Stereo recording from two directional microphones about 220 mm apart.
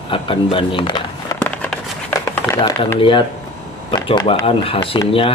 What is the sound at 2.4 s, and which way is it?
Speech, 15° left (ahead or behind).